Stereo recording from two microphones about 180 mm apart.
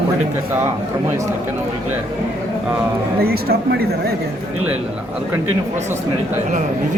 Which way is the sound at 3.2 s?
60° right (ahead or behind).